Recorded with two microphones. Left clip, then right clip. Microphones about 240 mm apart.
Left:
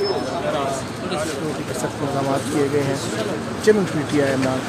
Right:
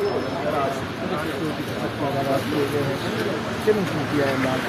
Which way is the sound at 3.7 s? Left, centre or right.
Left.